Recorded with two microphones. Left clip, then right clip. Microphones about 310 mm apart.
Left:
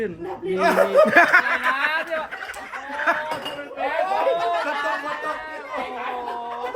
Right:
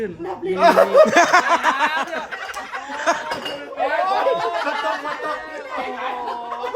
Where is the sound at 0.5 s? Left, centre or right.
Right.